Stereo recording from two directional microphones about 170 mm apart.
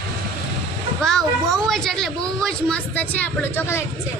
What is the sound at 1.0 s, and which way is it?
A woman's voice, 5° left (ahead or behind).